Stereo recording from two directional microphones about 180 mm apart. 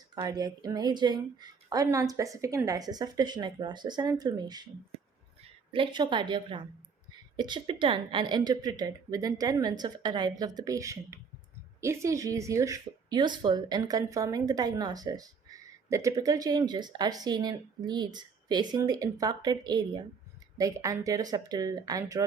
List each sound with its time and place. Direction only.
0.1 s speech: 20° right (ahead or behind)
5.7 s speech: 25° right (ahead or behind)